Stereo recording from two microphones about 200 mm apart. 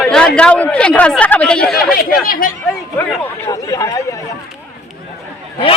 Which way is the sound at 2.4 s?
45° left (ahead or behind).